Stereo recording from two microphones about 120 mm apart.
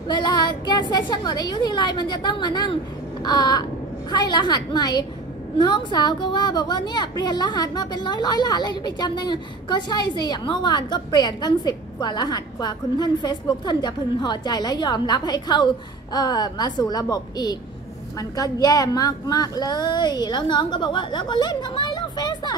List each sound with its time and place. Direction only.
0.1 s a woman's voice: 40° left (ahead or behind)